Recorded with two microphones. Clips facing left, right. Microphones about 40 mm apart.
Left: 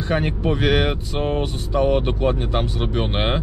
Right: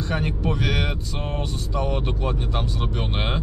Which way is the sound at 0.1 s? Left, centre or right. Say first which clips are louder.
Left 6 dB; left.